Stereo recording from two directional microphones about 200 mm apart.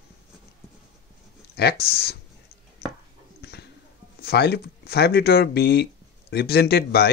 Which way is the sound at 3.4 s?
55° left (ahead or behind).